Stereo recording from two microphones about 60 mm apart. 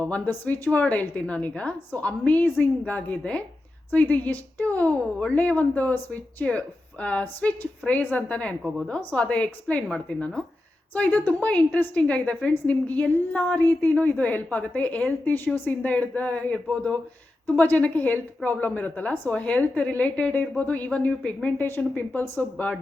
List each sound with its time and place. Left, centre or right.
0.3 s a woman's voice: left